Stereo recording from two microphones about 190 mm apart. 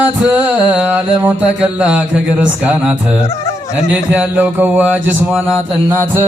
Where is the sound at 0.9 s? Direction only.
5° right (ahead or behind).